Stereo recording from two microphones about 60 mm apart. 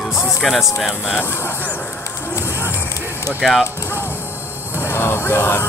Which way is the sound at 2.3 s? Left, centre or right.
Left.